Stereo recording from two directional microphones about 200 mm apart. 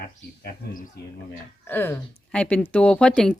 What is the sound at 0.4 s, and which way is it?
Speech, 45° left (ahead or behind).